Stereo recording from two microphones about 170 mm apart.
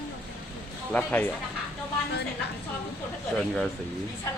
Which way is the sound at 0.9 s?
10° left (ahead or behind).